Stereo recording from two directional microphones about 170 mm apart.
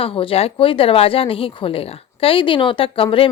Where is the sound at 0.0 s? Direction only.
30° left (ahead or behind).